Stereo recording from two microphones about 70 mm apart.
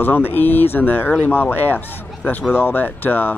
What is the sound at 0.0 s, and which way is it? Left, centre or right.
A man's voice, left.